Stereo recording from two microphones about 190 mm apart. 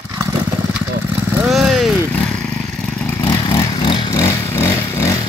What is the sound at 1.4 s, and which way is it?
Vehicle, 5° right (ahead or behind).